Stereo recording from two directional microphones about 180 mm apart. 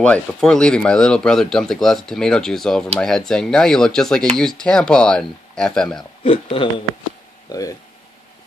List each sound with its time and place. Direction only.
0.0 s speech: 5° left (ahead or behind)
6.2 s speech: 30° left (ahead or behind)